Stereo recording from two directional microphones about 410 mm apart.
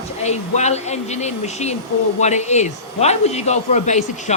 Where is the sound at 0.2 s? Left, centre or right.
Centre.